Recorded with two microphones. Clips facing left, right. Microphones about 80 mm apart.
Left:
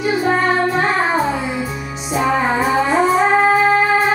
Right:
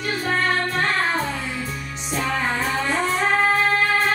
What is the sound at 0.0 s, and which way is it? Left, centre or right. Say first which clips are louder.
Music: left 7 dB; centre.